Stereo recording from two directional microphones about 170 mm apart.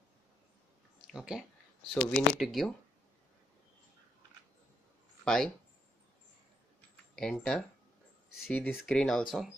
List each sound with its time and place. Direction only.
1.1 s speech: 5° right (ahead or behind)
5.2 s speech: centre (ahead or behind)
7.2 s speech: 5° left (ahead or behind)